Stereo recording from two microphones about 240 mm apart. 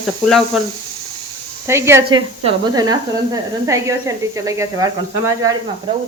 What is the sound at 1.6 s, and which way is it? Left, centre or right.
Speech, centre.